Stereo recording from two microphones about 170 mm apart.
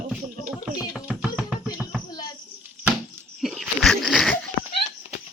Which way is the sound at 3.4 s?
Centre (ahead or behind).